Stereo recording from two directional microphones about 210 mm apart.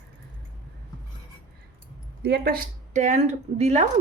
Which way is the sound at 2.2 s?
50° right (ahead or behind).